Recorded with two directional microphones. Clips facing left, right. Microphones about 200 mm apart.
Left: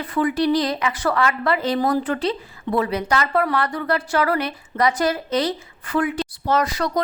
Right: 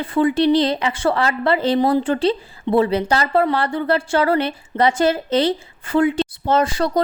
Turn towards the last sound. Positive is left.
turn(degrees=-30)  # may be behind; listen again after turning